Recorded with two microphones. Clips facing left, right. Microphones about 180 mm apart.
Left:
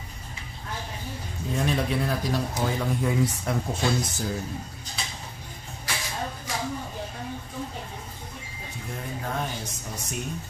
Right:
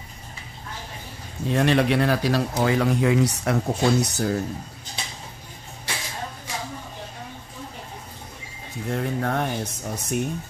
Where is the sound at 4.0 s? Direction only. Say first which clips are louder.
Right 6 dB; 65° right (ahead or behind).